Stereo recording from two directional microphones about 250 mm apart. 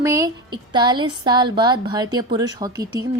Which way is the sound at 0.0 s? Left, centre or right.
Centre.